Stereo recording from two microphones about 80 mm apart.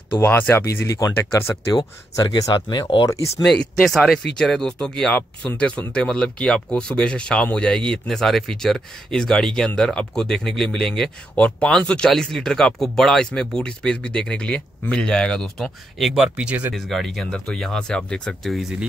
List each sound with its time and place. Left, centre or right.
0.1 s speech: left
0.8 s speech: left
1.7 s speech: left
3.5 s speech: centre
16.2 s speech: centre
16.7 s speech: centre